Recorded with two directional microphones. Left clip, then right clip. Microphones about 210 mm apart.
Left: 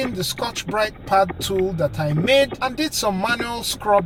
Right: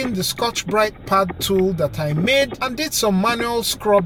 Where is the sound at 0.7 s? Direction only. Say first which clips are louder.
Right 1 dB; 35° right (ahead or behind).